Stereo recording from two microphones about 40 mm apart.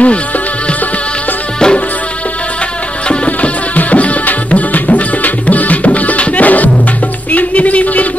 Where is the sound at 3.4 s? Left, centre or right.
Left.